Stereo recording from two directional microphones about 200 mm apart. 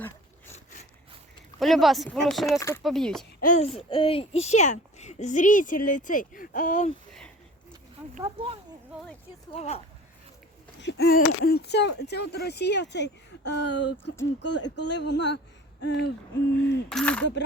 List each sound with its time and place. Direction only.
0.5 s a sound: 35° left (ahead or behind)
1.5 s speech: centre (ahead or behind)
2.6 s speech: 15° left (ahead or behind)
2.8 s speech: centre (ahead or behind)
3.4 s a child's voice: 35° left (ahead or behind)
8.2 s speech: 25° right (ahead or behind)
9.5 s a child's voice: 30° left (ahead or behind)
10.8 s speech: 60° left (ahead or behind)
16.9 s speech: 5° left (ahead or behind)